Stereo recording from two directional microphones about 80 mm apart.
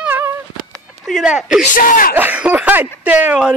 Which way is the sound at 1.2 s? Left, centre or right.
Centre.